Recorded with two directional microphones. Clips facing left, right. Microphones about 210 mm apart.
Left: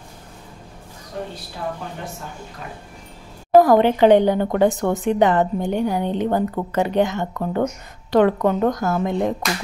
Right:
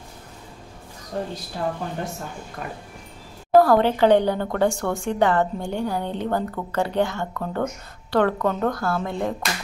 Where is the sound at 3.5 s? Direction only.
15° left (ahead or behind).